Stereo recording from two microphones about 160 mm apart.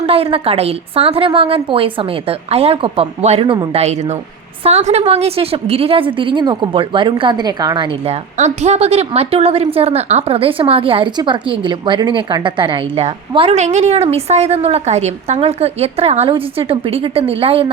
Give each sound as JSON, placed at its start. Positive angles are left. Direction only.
{"t": 0.0, "sound": "a woman's voice", "side_deg": -40}